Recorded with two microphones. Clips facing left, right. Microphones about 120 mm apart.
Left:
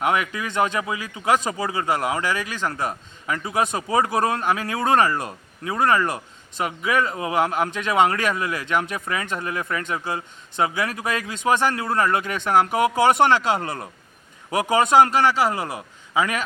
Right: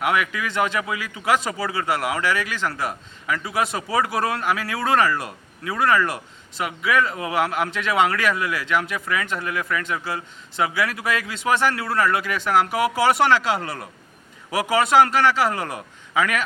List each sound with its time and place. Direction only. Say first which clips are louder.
0.0 s speech: even; 30° left (ahead or behind)
0.4 s a man's voice: left 1 dB; 20° left (ahead or behind)